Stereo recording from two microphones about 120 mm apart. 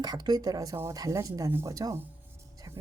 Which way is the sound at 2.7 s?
30° right (ahead or behind).